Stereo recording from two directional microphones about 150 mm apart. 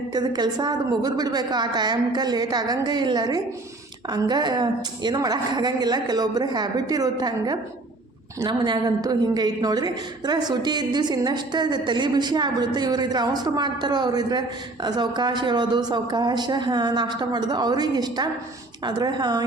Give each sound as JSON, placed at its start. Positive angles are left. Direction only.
{"t": 0.1, "sound": "a woman's voice", "side_deg": -30}